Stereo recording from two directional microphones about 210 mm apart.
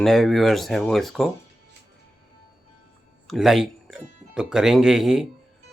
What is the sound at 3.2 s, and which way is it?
Speech, centre (ahead or behind).